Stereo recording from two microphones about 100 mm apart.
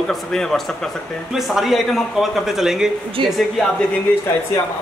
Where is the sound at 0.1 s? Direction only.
5° left (ahead or behind).